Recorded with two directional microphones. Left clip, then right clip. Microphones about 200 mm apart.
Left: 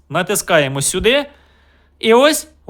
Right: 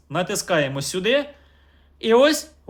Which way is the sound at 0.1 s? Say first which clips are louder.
Left 7 dB; 35° left (ahead or behind).